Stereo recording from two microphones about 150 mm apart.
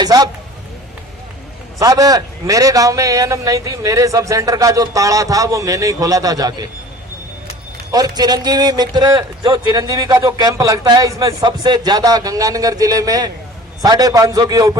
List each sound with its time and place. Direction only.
0.0 s a sound: 25° right (ahead or behind)
1.8 s speech: 25° right (ahead or behind)
7.9 s speech: 25° right (ahead or behind)